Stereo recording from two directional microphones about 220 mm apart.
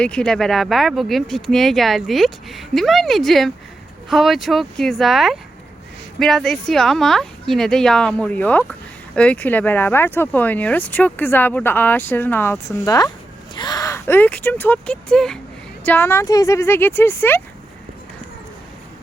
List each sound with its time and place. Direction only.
0.0 s speech: 5° left (ahead or behind)